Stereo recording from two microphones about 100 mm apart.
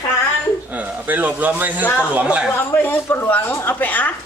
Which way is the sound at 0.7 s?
15° right (ahead or behind).